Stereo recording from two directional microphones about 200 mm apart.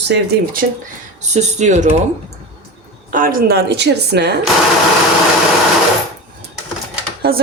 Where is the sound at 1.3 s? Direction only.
35° right (ahead or behind).